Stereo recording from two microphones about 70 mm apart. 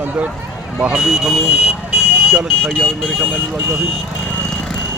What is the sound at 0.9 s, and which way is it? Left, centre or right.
Speech, centre.